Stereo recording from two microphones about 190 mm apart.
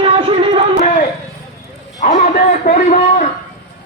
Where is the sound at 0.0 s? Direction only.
30° right (ahead or behind).